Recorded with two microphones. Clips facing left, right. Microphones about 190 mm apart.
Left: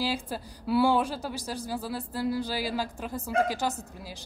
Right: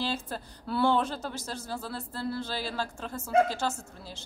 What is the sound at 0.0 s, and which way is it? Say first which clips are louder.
Speech: left 2 dB; 10° left (ahead or behind).